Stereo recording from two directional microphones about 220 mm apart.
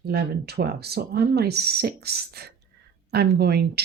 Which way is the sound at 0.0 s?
45° right (ahead or behind).